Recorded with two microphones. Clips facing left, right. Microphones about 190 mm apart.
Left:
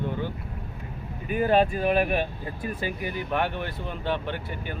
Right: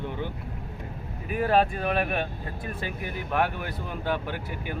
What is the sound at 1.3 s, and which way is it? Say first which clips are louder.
Speech: left 2 dB; centre (ahead or behind).